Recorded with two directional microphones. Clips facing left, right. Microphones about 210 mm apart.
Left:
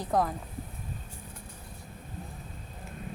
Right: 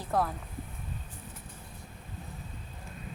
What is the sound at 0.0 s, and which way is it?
Speech, 15° left (ahead or behind).